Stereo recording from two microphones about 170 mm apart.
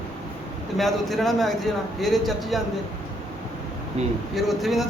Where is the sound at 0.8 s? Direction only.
Centre (ahead or behind).